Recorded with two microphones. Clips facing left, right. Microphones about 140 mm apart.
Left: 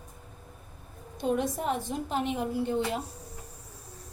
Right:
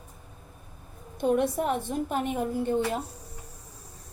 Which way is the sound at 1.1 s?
55° right (ahead or behind).